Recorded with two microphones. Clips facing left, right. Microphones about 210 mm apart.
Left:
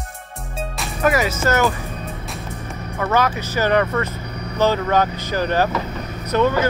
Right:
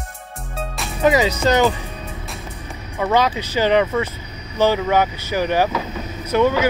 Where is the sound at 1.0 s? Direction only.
20° right (ahead or behind).